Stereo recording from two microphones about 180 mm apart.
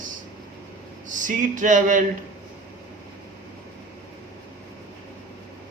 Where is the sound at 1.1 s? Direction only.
45° right (ahead or behind).